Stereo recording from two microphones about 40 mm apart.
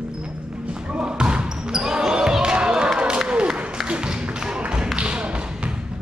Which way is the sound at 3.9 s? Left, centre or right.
Right.